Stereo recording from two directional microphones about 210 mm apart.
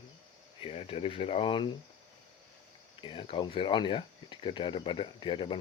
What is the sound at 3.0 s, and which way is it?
Speech, 25° left (ahead or behind).